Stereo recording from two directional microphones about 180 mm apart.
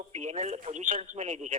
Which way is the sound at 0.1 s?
40° right (ahead or behind).